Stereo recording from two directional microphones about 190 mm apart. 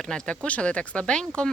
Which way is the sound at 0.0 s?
5° left (ahead or behind).